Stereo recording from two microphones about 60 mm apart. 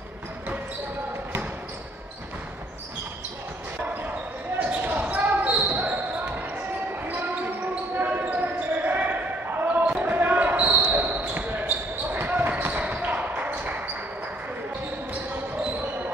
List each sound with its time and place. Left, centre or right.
4.6 s basketball bounce: right
7.1 s basketball bounce: right